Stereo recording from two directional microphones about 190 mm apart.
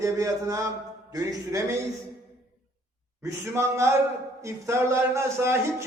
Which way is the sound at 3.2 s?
15° right (ahead or behind).